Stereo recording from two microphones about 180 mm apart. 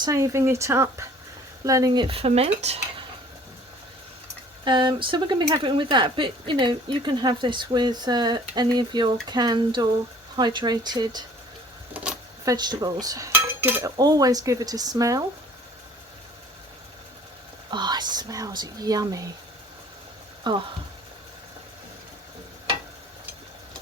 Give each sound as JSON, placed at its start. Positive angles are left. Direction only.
{"t": 0.0, "sound": "speech", "side_deg": -15}
{"t": 1.6, "sound": "stir", "side_deg": -20}
{"t": 4.6, "sound": "speech", "side_deg": -25}
{"t": 12.5, "sound": "speech", "side_deg": -20}
{"t": 17.7, "sound": "speech", "side_deg": -25}
{"t": 20.4, "sound": "speech", "side_deg": -25}